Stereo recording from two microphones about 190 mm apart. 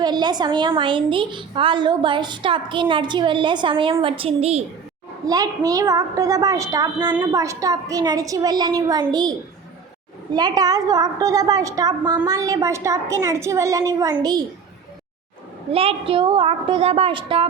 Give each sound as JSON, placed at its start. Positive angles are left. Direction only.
{"t": 0.0, "sound": "a woman's voice", "side_deg": -20}
{"t": 5.2, "sound": "a woman's voice", "side_deg": -20}
{"t": 10.3, "sound": "a woman's voice", "side_deg": -20}
{"t": 15.7, "sound": "a woman's voice", "side_deg": -30}